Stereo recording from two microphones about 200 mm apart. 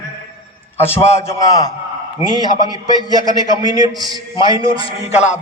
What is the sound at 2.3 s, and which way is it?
Speech, 20° right (ahead or behind).